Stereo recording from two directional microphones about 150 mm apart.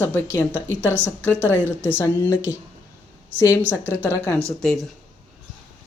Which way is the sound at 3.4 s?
15° left (ahead or behind).